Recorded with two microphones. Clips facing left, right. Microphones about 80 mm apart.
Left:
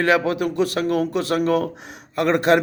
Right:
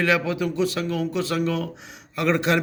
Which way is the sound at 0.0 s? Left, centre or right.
Left.